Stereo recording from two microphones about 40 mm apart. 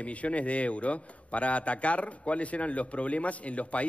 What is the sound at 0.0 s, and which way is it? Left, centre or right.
A man's voice, left.